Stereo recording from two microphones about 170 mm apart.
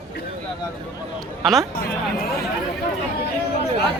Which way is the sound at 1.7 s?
60° left (ahead or behind).